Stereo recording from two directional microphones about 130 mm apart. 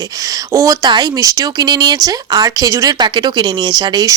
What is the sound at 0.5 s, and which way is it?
Speech, 25° right (ahead or behind).